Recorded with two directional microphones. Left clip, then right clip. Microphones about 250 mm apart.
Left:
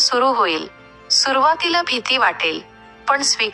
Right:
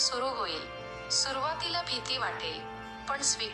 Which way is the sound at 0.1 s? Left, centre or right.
Left.